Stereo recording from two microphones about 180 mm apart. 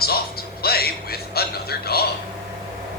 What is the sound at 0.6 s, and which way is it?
A man's voice, 60° left (ahead or behind).